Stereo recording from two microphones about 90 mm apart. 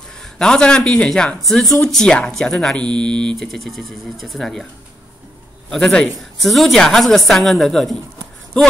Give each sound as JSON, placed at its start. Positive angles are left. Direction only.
{"t": 0.2, "sound": "speech", "side_deg": 10}
{"t": 5.7, "sound": "speech", "side_deg": 5}